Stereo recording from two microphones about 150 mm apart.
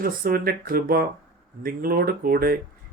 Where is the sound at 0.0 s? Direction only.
80° right.